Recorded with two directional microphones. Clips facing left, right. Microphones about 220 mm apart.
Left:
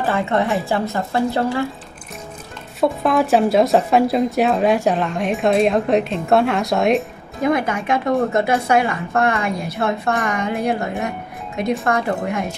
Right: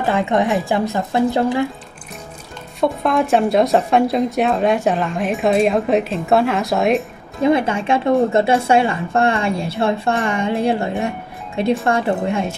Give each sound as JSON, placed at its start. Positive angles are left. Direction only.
{"t": 0.0, "sound": "speech", "side_deg": -15}
{"t": 2.8, "sound": "speech", "side_deg": 0}
{"t": 7.4, "sound": "a woman's voice", "side_deg": -30}